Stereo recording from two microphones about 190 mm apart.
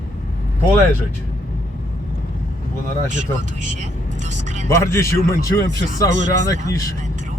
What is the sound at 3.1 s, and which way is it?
Speech, 40° right (ahead or behind).